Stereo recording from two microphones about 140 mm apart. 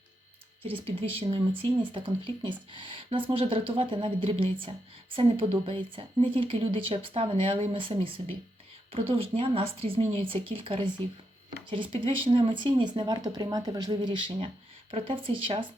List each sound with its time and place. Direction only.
0.7 s speech: 45° right (ahead or behind)
14.3 s speech: 45° right (ahead or behind)